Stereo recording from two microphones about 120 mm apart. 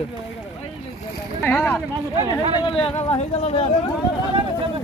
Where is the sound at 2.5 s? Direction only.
45° left (ahead or behind).